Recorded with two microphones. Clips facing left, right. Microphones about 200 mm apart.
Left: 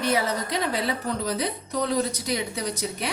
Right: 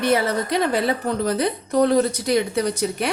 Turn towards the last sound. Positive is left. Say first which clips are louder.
# right 7 dB
turn(degrees=-60)  # may be behind; listen again after turning